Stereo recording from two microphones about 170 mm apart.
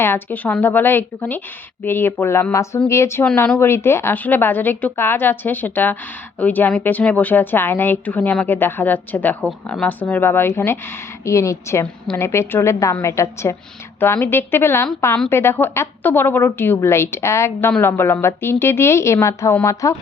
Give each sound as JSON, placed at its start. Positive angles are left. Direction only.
{"t": 0.0, "sound": "a woman's voice", "side_deg": 10}